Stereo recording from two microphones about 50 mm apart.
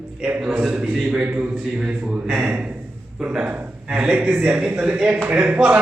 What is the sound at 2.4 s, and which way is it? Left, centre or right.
Speech, right.